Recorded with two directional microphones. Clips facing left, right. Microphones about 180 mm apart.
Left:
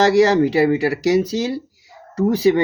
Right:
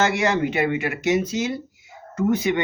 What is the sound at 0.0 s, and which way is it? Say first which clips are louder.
Speech: left 7 dB; 35° left (ahead or behind).